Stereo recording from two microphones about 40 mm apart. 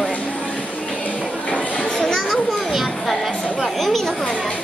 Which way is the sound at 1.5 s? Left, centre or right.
Left.